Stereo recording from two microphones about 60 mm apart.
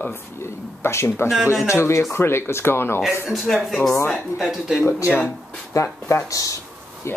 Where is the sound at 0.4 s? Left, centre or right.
Left.